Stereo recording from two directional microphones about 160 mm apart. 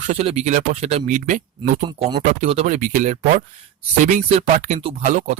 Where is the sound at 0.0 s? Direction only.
45° right (ahead or behind).